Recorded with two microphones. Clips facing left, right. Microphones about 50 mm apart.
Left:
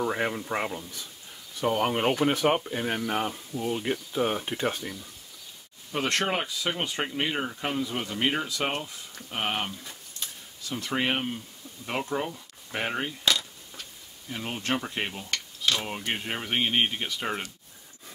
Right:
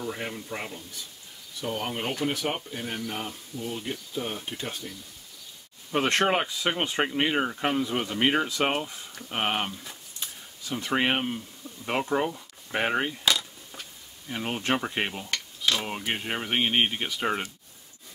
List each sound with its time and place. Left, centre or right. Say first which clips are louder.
0.0 s speech: left 6 dB; left
0.5 s speech: left 5 dB; left
5.9 s speech: right 4 dB; centre
9.3 s camera: right 2 dB; centre
10.8 s speech: right 2 dB; centre
13.2 s a sound: even; centre
14.3 s speech: right 2 dB; centre